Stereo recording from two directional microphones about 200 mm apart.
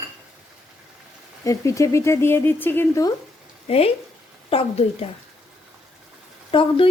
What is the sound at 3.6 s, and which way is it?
A woman's voice, 30° left (ahead or behind).